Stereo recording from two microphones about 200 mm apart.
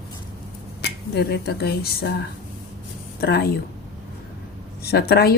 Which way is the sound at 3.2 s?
50° left (ahead or behind).